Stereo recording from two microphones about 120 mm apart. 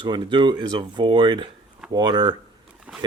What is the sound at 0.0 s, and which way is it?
Speech, 40° right (ahead or behind).